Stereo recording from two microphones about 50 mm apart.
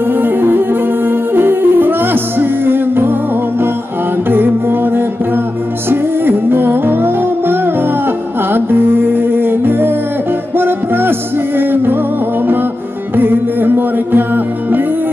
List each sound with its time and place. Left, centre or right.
0.2 s music: right
4.3 s music: right
13.1 s music: right